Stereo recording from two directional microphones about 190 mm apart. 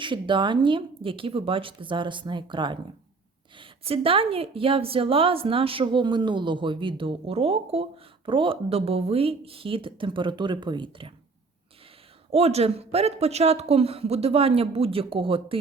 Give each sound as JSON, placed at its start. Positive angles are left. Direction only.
{"t": 0.0, "sound": "a woman's voice", "side_deg": -25}
{"t": 12.3, "sound": "speech", "side_deg": -35}